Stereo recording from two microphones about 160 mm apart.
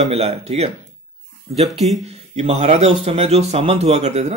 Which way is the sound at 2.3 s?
45° right (ahead or behind).